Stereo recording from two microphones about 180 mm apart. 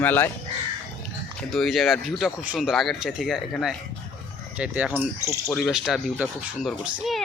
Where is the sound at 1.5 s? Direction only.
Centre (ahead or behind).